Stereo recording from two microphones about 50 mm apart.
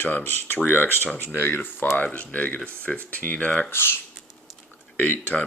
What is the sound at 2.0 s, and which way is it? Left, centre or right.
Speech, left.